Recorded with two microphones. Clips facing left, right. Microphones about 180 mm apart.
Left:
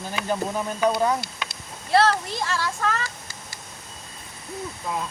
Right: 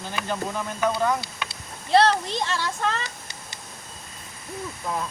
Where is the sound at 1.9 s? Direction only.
20° right (ahead or behind).